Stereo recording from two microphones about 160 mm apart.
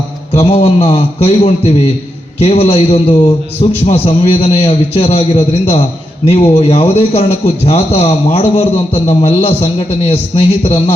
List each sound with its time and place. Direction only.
0.3 s a man's voice: 40° left (ahead or behind)